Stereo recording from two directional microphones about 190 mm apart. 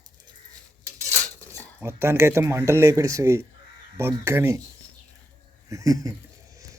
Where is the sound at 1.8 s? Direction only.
15° right (ahead or behind).